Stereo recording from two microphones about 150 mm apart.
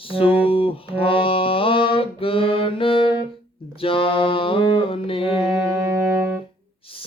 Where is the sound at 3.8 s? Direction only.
35° left (ahead or behind).